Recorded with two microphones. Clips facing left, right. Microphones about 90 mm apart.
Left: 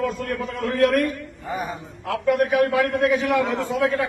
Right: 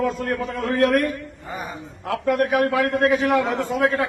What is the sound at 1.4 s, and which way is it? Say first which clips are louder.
Speech: left 5 dB; 20° left (ahead or behind).